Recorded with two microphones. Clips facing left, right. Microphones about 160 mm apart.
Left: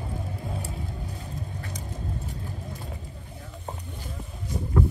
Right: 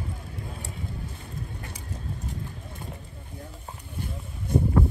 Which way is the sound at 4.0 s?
60° right (ahead or behind).